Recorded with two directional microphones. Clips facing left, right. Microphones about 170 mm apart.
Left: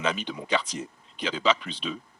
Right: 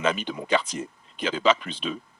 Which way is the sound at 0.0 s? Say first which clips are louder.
Right 3 dB; 50° right (ahead or behind).